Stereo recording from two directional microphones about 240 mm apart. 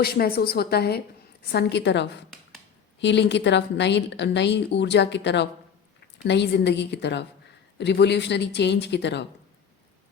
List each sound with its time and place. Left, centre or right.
0.0 s a woman's voice: left